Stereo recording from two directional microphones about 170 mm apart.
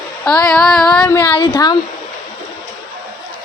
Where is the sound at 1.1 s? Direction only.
10° left (ahead or behind).